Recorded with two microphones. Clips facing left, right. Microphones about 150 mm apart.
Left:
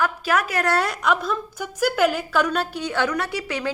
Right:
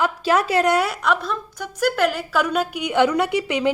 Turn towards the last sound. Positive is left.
turn(degrees=-20)  # may be behind; listen again after turning